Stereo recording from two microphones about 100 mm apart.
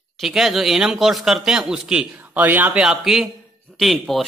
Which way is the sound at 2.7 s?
5° right (ahead or behind).